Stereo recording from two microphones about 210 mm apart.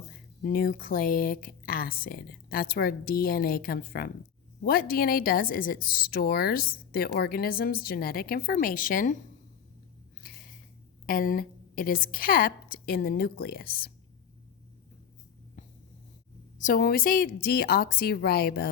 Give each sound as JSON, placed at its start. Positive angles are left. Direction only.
{"t": 0.4, "sound": "a woman's voice", "side_deg": 45}
{"t": 11.0, "sound": "a woman's voice", "side_deg": 40}
{"t": 16.6, "sound": "a woman's voice", "side_deg": 40}